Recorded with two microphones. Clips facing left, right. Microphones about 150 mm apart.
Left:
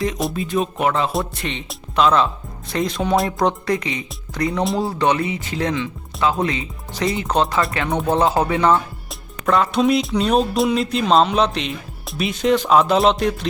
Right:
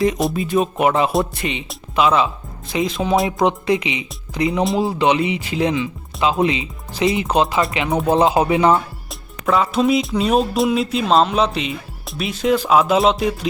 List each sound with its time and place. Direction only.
0.0 s speech: centre (ahead or behind); by 6.7 s 20° right (ahead or behind)
7.0 s speech: 5° right (ahead or behind)
9.5 s speech: centre (ahead or behind)